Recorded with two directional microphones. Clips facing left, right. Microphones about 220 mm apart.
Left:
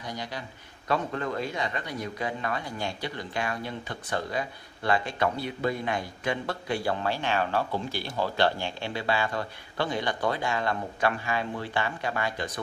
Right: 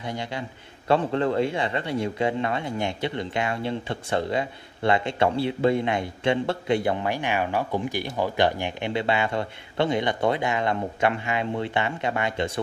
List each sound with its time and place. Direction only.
0.0 s a man's voice: 25° right (ahead or behind)